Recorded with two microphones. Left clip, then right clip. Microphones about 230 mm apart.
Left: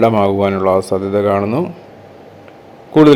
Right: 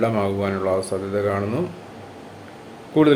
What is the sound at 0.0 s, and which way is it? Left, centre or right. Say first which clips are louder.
Speech: left 9 dB; left.